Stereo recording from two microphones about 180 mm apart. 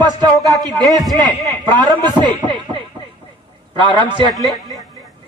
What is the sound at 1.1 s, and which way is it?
A man's voice, 25° right (ahead or behind).